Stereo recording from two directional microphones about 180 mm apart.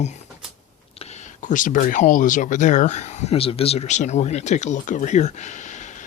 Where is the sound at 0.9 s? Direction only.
40° left (ahead or behind).